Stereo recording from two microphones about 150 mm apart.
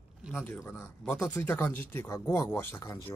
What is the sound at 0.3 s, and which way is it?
Speech, 15° left (ahead or behind).